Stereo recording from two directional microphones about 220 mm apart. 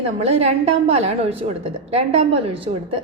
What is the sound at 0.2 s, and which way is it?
A woman's voice, 30° right (ahead or behind).